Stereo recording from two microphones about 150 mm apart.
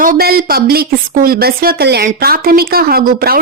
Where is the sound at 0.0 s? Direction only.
80° right.